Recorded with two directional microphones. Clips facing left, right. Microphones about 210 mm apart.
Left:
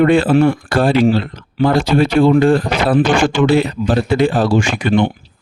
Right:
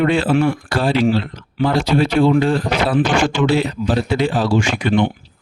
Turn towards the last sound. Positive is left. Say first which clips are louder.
# left 2 dB
turn(degrees=45)  # may be behind; listen again after turning